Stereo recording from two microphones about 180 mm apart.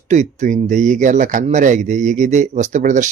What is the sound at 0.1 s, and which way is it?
Speech, 40° right (ahead or behind).